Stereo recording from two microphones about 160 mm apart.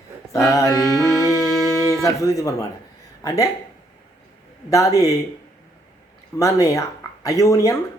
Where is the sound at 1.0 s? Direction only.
20° left (ahead or behind).